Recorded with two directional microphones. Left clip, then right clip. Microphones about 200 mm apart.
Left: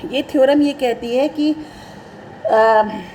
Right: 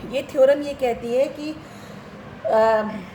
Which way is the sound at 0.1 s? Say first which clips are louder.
Left 3 dB; 45° left (ahead or behind).